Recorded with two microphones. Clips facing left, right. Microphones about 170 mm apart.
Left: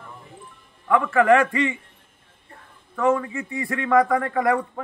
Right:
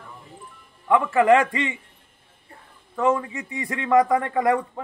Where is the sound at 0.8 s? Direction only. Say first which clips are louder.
Even; 20° right (ahead or behind).